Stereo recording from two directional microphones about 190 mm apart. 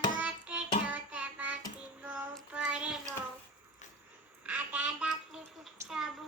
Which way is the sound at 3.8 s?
40° left (ahead or behind).